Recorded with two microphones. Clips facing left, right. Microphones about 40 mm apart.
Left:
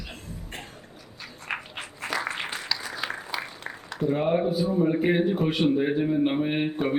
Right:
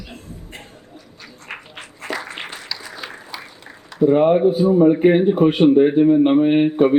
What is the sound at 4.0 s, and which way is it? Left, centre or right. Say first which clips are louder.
A man's voice: right 10 dB; right.